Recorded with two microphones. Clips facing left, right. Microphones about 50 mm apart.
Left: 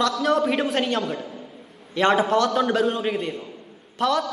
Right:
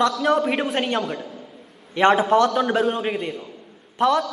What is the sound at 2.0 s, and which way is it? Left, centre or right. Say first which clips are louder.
Speech: right 3 dB; right.